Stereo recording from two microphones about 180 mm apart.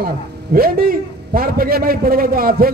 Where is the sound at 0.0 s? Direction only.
55° right (ahead or behind).